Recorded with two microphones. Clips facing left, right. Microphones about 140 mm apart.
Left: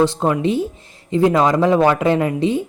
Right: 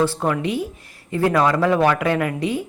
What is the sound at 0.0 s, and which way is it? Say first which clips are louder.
Speech: left 4 dB; 20° left (ahead or behind).